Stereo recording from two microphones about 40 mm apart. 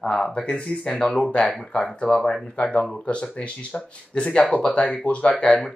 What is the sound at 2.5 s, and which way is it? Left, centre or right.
Speech, left.